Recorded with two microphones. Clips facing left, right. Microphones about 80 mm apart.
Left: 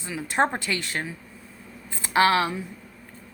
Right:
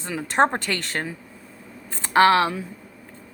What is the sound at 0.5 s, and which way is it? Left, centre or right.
A woman's voice, right.